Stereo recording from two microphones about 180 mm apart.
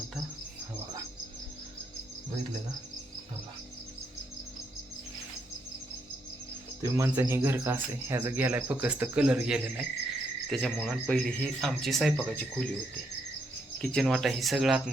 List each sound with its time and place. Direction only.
6.8 s speech: 15° right (ahead or behind); by 12.6 s 5° left (ahead or behind)
13.7 s speech: 5° left (ahead or behind)